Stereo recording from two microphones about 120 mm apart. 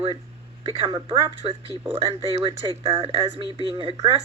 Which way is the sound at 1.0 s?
45° right (ahead or behind).